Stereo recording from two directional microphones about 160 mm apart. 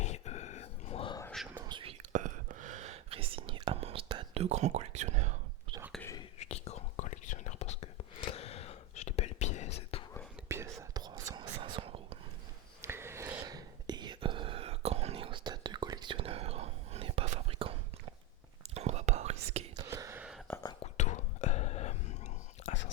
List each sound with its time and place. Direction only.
0.0 s a sound: 45° left (ahead or behind)
1.6 s whispering: 30° right (ahead or behind)
2.0 s whispering: 55° right (ahead or behind); by 4.4 s 30° right (ahead or behind)
4.4 s speech: 45° right (ahead or behind)
6.4 s whispering: 40° left (ahead or behind)
10.5 s whispering: 15° right (ahead or behind)
11.6 s whispering: 35° right (ahead or behind)
12.8 s whispering: 15° right (ahead or behind); by 19.6 s 45° right (ahead or behind)
19.7 s whispering: 20° right (ahead or behind)
20.5 s whispering: 10° left (ahead or behind)
20.9 s whispering: 45° left (ahead or behind)